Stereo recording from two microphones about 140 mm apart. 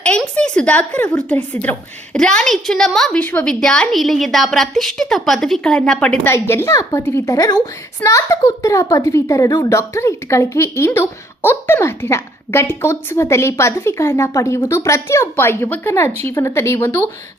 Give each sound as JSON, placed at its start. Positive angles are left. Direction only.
{"t": 0.0, "sound": "a woman's voice", "side_deg": 10}
{"t": 6.2, "sound": "a woman's voice", "side_deg": 15}